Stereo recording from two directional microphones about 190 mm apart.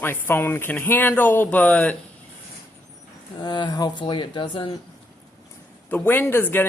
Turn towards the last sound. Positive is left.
turn(degrees=10)  # may be behind; listen again after turning